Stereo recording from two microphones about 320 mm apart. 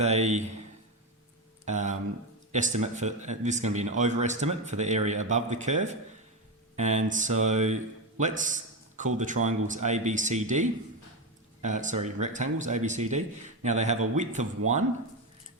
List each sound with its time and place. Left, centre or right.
0.0 s speech: right
1.6 s a man's voice: right